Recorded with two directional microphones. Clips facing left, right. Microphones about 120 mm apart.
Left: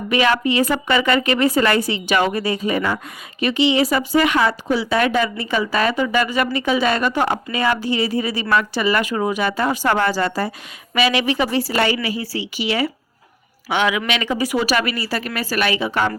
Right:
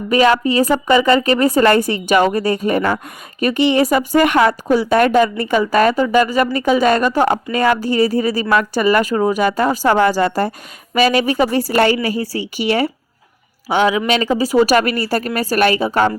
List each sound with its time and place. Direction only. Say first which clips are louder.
0.1 s a woman's voice: right 4 dB; 35° right (ahead or behind)
10.1 s a woman's voice: right 5 dB; 20° right (ahead or behind)
10.9 s a woman's voice: right 4 dB; 40° right (ahead or behind)
13.7 s speech: right 5 dB; 35° right (ahead or behind)